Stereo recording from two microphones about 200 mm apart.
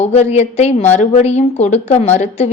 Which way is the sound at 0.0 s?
30° left (ahead or behind).